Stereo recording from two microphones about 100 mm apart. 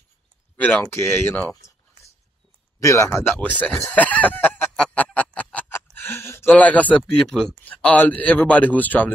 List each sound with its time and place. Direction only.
0.6 s speech: 15° left (ahead or behind)
2.8 s speech: 30° left (ahead or behind)
3.3 s a man's voice: 15° left (ahead or behind)
4.9 s music: 15° left (ahead or behind)
5.9 s a sound: 25° left (ahead or behind)
6.5 s a man's voice: 15° left (ahead or behind)